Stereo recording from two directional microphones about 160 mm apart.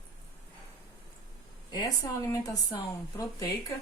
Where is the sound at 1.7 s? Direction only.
25° left (ahead or behind).